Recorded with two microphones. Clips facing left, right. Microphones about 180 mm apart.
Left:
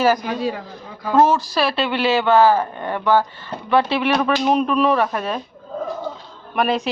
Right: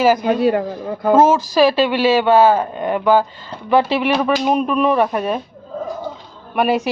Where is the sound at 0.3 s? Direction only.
65° right (ahead or behind).